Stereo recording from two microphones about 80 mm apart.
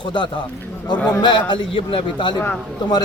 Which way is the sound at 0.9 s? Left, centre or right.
Centre.